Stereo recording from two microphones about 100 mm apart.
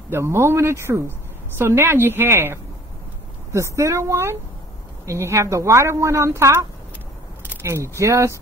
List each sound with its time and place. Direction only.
0.1 s speech: 25° right (ahead or behind)
7.6 s speech: 30° right (ahead or behind)